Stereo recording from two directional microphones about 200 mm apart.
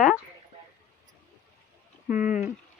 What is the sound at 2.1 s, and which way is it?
Speech, 40° left (ahead or behind).